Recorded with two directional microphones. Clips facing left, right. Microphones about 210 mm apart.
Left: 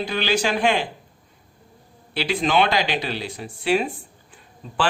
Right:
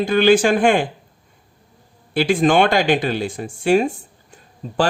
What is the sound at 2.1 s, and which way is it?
Speech, 50° right (ahead or behind).